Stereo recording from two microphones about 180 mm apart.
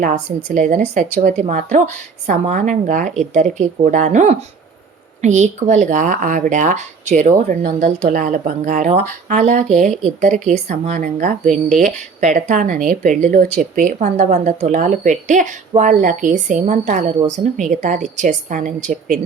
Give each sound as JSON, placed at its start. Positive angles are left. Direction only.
{"t": 0.0, "sound": "a woman's voice", "side_deg": -45}